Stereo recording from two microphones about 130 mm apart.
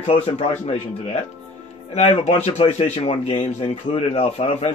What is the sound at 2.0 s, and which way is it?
Speech, 60° left (ahead or behind).